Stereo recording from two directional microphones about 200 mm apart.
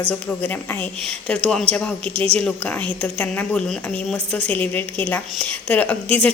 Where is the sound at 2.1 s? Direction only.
30° right (ahead or behind).